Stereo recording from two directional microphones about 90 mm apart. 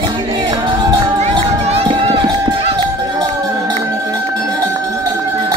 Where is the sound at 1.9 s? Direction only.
80° right.